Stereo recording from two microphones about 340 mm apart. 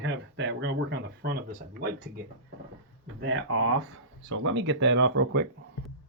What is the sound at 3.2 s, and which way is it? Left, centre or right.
Speech, right.